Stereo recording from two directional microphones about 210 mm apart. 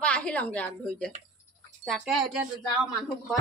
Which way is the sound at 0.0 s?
5° left (ahead or behind).